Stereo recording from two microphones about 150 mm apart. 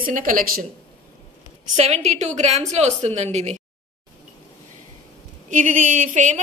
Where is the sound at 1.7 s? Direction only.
50° right (ahead or behind).